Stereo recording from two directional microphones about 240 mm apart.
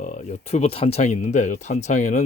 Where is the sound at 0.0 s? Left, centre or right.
Left.